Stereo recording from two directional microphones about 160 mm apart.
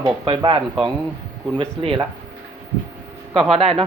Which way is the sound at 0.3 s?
30° right (ahead or behind).